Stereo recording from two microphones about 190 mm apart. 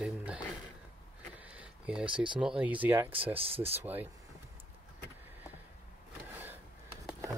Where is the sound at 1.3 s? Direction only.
5° right (ahead or behind).